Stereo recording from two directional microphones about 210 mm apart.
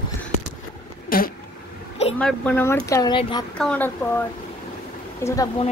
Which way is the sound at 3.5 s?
5° left (ahead or behind).